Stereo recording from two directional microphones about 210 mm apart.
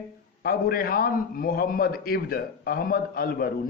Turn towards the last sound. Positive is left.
turn(degrees=45)  # may be behind; listen again after turning